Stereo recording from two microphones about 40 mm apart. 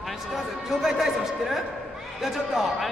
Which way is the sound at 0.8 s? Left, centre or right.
Centre.